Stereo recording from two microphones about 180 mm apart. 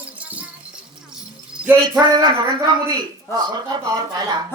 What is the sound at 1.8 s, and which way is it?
A woman's voice, 25° right (ahead or behind).